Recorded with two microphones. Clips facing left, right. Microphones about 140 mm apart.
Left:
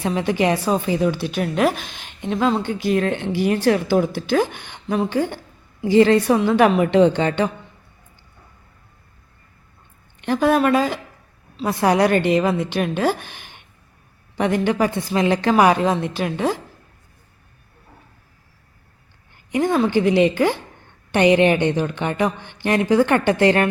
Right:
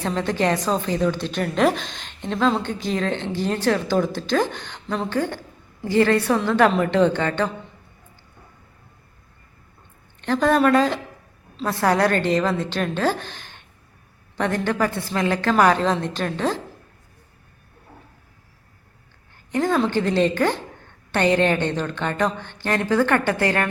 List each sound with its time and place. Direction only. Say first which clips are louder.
0.0 s a woman's voice: left 2 dB; 10° left (ahead or behind)
10.2 s a woman's voice: left 1 dB; 10° left (ahead or behind)
19.5 s a woman's voice: left 2 dB; 10° left (ahead or behind)